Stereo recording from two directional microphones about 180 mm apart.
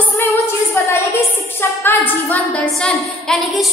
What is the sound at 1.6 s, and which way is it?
A woman's voice, 15° left (ahead or behind).